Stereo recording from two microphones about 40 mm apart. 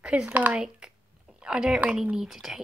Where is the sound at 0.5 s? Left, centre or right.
Centre.